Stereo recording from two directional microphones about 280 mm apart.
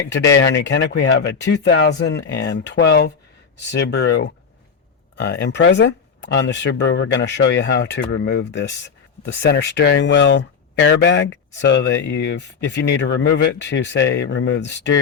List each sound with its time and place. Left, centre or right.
0.1 s speech: left